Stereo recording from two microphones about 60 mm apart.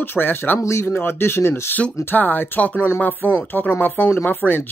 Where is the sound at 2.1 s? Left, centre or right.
Left.